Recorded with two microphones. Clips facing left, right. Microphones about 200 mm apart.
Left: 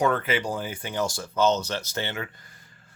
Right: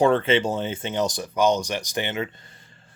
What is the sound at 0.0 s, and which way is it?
Speech, 30° right (ahead or behind).